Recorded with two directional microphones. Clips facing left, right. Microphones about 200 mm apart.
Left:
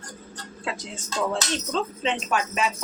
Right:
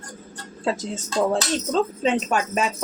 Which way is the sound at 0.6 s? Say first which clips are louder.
Right 8 dB; 40° right (ahead or behind).